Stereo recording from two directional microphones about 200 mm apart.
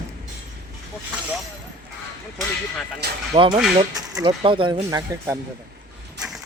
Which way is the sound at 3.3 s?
25° right (ahead or behind).